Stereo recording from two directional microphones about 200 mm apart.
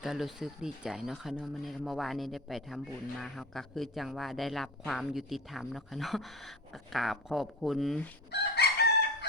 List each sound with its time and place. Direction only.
0.0 s speech: centre (ahead or behind)
8.3 s chicken: 55° left (ahead or behind)